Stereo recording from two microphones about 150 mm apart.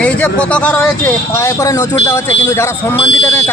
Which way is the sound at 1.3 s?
20° left (ahead or behind).